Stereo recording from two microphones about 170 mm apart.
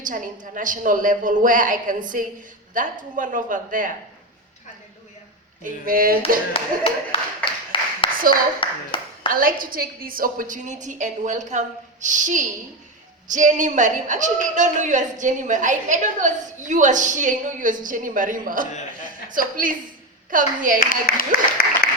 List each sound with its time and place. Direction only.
0.0 s a woman's voice: 50° right (ahead or behind)
5.6 s a sound: 55° right (ahead or behind)
6.5 s speech: 35° left (ahead or behind)
7.7 s a sound: 30° left (ahead or behind)
9.3 s a woman's voice: 55° right (ahead or behind)
20.7 s speech: 55° left (ahead or behind)
21.6 s applause: 60° left (ahead or behind)